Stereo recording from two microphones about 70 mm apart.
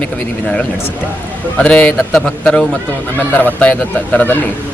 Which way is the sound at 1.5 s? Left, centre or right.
Centre.